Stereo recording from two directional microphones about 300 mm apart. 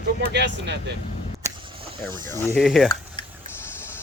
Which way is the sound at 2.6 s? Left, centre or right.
Centre.